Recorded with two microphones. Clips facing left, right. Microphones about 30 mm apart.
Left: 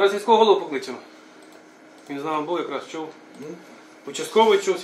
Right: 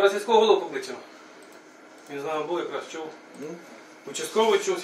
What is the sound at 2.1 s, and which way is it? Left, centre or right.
Speech, left.